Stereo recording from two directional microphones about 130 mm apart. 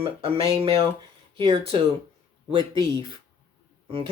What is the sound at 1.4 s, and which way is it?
Speech, 40° right (ahead or behind).